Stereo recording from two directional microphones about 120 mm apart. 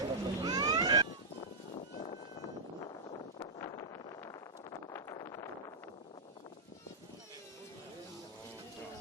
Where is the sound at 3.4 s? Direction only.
30° left (ahead or behind).